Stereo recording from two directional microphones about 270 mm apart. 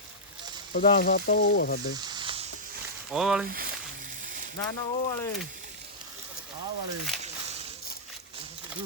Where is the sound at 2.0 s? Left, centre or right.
Centre.